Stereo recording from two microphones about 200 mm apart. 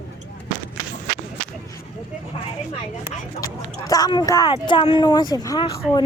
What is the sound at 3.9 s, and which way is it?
Speech, 20° left (ahead or behind).